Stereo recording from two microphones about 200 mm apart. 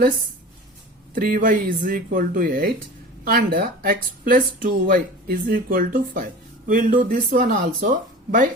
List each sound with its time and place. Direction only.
1.1 s speech: 45° right (ahead or behind)